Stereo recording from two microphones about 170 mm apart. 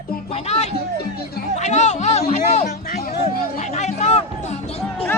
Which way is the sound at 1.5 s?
40° left (ahead or behind).